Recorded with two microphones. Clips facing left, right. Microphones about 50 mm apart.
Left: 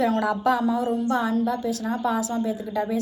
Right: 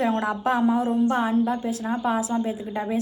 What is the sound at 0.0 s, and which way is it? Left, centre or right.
A woman's voice, right.